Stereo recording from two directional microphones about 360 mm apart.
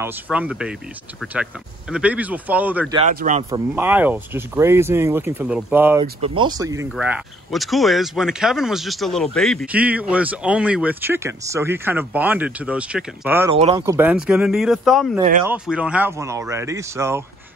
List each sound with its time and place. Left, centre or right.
0.0 s speech: centre
3.0 s speech: right
3.4 s speech: centre